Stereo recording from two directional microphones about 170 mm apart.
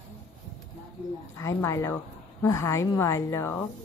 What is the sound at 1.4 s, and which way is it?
A woman's voice, 15° left (ahead or behind).